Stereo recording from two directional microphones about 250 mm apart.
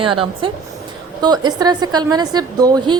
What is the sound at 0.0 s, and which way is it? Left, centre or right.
A woman's voice, centre.